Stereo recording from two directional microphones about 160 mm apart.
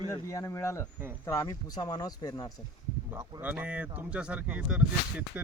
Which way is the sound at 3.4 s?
10° right (ahead or behind).